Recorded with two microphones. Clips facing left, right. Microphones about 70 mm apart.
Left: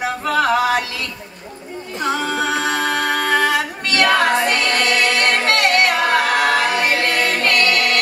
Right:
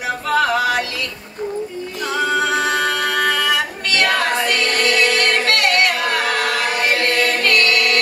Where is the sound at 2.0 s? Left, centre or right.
Left.